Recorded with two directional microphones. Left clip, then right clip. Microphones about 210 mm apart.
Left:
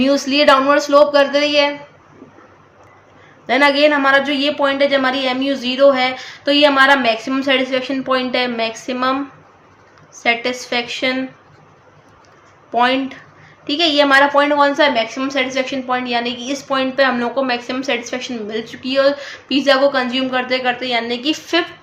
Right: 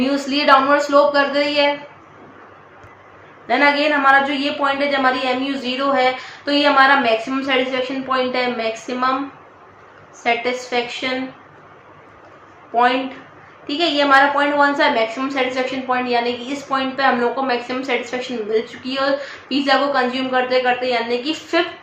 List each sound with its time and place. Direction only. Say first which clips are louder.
0.0 s a woman's voice: left 5 dB; 50° left (ahead or behind)
3.4 s a woman's voice: left 3 dB; 55° left (ahead or behind)
10.2 s a woman's voice: left 2 dB; 50° left (ahead or behind)
13.7 s a woman's voice: left 2 dB; 50° left (ahead or behind)